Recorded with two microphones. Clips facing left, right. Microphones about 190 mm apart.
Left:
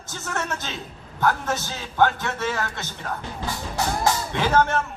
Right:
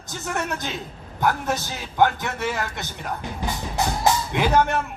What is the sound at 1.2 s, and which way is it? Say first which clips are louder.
A man's voice: even; 15° right (ahead or behind).